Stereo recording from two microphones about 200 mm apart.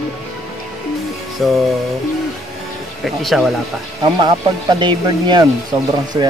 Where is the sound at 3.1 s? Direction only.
Centre (ahead or behind).